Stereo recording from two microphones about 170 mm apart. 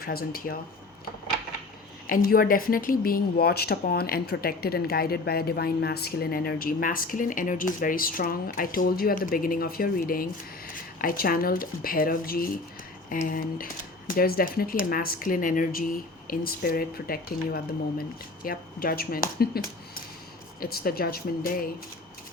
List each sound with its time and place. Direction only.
0.0 s speech: 60° left (ahead or behind)
2.0 s speech: 55° left (ahead or behind)